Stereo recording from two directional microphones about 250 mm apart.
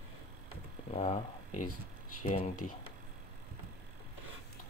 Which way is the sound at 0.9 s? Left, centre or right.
Left.